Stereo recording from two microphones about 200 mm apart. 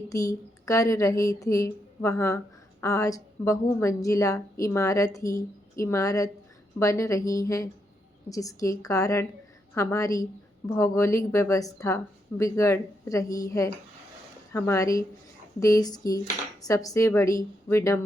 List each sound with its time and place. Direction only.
0.1 s a woman's voice: 15° left (ahead or behind)